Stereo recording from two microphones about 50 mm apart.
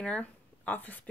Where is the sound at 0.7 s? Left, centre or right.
Left.